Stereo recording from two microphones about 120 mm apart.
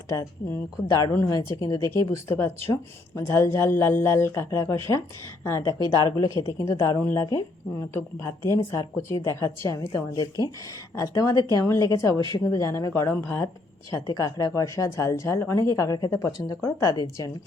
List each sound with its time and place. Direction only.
0.9 s a woman's voice: 25° left (ahead or behind)
5.8 s speech: 35° right (ahead or behind)
6.4 s a woman's voice: 25° left (ahead or behind)